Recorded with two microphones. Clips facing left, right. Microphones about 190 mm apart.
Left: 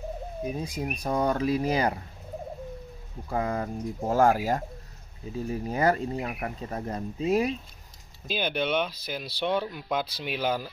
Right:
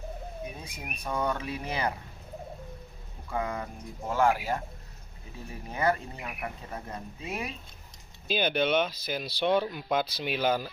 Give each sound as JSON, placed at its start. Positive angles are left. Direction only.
{"t": 0.5, "sound": "speech", "side_deg": 35}
{"t": 3.3, "sound": "speech", "side_deg": 35}
{"t": 8.3, "sound": "speech", "side_deg": 0}